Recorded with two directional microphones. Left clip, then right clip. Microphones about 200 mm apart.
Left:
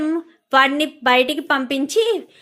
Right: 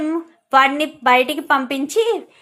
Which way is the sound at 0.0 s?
25° left (ahead or behind).